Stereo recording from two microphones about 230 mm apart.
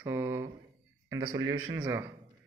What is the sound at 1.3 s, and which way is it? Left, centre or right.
Speech, right.